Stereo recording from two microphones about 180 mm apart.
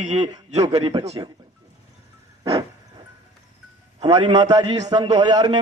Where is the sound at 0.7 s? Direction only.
30° right (ahead or behind).